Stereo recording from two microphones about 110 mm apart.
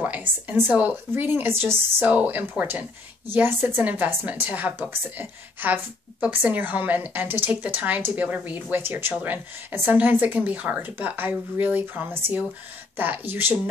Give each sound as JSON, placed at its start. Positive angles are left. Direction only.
{"t": 0.0, "sound": "speech", "side_deg": -15}